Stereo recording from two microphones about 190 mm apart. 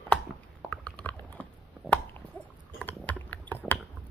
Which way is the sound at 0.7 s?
5° left (ahead or behind).